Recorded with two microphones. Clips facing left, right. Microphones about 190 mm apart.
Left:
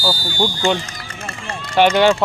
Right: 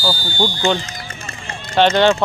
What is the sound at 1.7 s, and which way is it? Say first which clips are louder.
Speech: even; 10° left (ahead or behind).